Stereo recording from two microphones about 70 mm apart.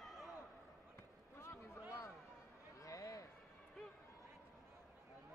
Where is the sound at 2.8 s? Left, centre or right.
Left.